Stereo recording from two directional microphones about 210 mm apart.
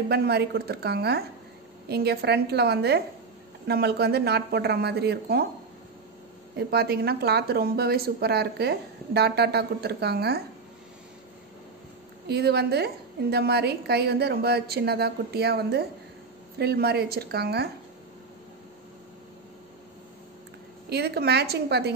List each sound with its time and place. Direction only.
0.1 s speech: 50° right (ahead or behind)
6.7 s speech: 50° right (ahead or behind)
12.3 s speech: 50° right (ahead or behind)
20.9 s speech: 50° right (ahead or behind)